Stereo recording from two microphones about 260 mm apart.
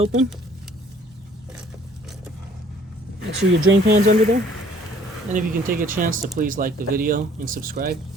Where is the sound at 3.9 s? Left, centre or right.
Right.